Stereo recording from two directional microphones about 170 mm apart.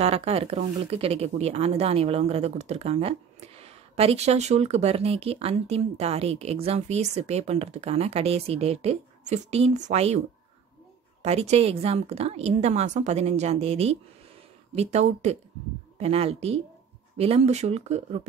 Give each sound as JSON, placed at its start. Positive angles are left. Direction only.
{"t": 0.0, "sound": "speech", "side_deg": -35}
{"t": 11.2, "sound": "speech", "side_deg": -40}